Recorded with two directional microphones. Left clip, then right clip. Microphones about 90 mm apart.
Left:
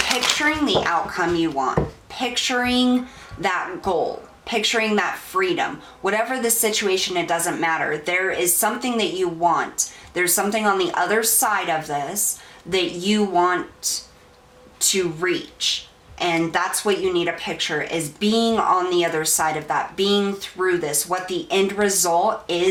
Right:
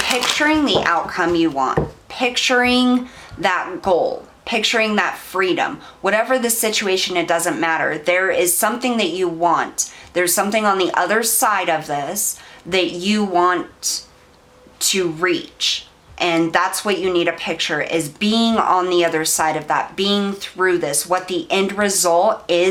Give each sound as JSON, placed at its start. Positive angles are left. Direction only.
{"t": 0.1, "sound": "speech", "side_deg": -25}
{"t": 0.3, "sound": "speech", "side_deg": -35}
{"t": 14.8, "sound": "speech", "side_deg": -40}